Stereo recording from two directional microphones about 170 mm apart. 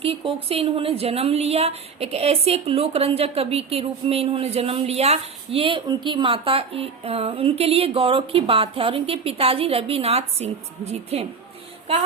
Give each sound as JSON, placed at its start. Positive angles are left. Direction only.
{"t": 0.0, "sound": "a woman's voice", "side_deg": -35}